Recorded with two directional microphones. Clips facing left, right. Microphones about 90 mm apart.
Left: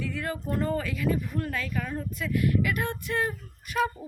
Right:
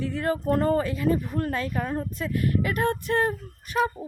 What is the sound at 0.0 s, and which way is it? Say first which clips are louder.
Speech: right 6 dB; 35° right (ahead or behind).